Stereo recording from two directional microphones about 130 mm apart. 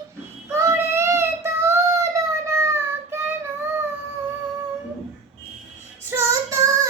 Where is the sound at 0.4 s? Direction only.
20° right (ahead or behind).